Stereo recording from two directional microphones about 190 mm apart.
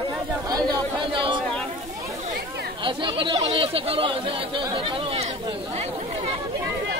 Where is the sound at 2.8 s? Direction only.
25° right (ahead or behind).